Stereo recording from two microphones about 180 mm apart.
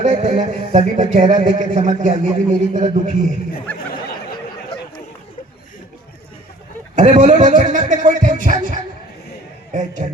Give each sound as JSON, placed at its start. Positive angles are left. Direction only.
{"t": 0.0, "sound": "speech", "side_deg": -40}
{"t": 6.9, "sound": "speech", "side_deg": -40}